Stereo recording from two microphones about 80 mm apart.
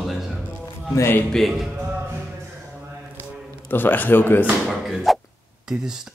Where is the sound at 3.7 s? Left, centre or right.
Left.